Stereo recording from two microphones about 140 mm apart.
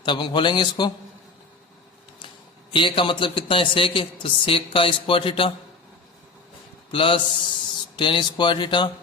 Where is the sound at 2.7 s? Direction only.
35° left (ahead or behind).